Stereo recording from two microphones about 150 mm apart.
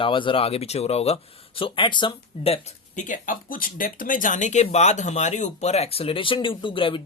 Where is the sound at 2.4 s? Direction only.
45° left (ahead or behind).